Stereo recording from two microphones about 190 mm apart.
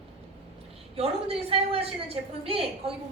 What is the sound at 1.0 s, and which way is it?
A woman's voice, 30° right (ahead or behind).